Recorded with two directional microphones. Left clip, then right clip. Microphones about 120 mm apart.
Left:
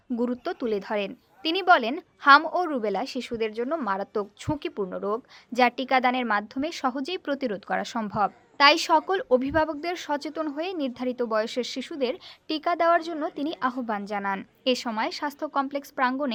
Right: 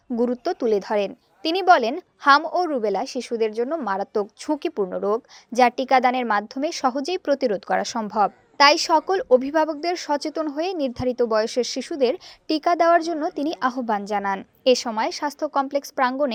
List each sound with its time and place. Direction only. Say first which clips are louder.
0.2 s a woman's voice: right 7 dB; 30° right (ahead or behind)